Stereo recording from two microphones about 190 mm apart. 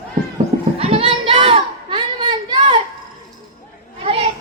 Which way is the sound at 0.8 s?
30° right (ahead or behind).